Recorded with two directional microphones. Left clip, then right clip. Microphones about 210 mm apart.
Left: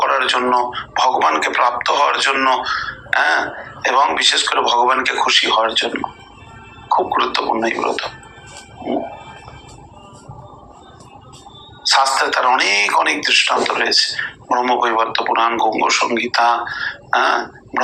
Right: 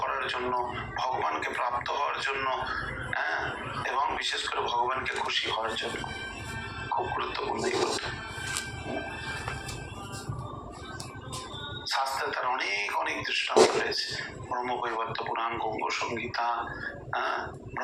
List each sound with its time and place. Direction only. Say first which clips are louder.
0.0 s speech: left 15 dB; 45° left (ahead or behind)
6.9 s gargling: left 15 dB; 45° left (ahead or behind)
11.9 s speech: left 16 dB; 45° left (ahead or behind)